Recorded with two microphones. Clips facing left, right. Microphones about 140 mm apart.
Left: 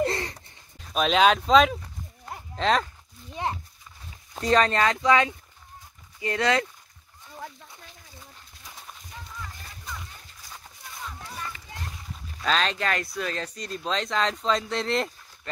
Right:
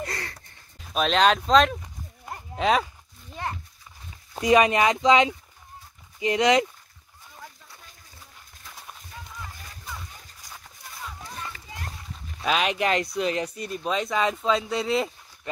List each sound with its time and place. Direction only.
0.0 s a sound: 20° left (ahead or behind)
0.7 s speech: centre (ahead or behind)
4.4 s speech: 10° right (ahead or behind)
12.4 s speech: 10° right (ahead or behind)